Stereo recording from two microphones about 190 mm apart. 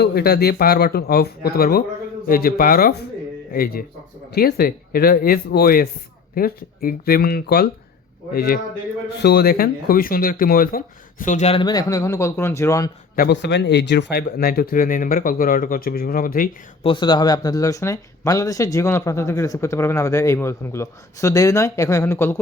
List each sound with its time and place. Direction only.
0.0 s a man's voice: 55° left (ahead or behind); by 12.9 s 15° left (ahead or behind)
13.1 s speech: 65° left (ahead or behind); by 16.5 s 50° left (ahead or behind)
16.8 s speech: 25° left (ahead or behind)